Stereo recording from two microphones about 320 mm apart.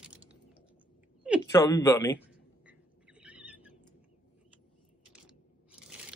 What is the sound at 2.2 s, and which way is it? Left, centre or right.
Whispering, centre.